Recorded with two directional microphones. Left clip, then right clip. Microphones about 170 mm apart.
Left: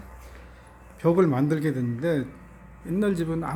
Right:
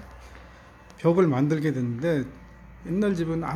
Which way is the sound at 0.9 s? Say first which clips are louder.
Even; 5° right (ahead or behind).